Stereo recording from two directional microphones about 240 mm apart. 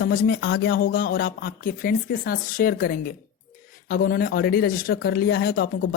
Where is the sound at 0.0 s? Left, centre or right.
Left.